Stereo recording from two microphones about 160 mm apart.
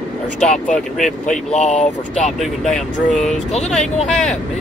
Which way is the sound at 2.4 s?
5° left (ahead or behind).